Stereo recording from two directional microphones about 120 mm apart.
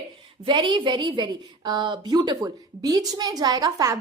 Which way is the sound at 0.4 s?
40° right (ahead or behind).